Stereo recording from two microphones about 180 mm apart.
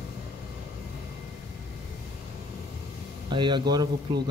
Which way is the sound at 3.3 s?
25° right (ahead or behind).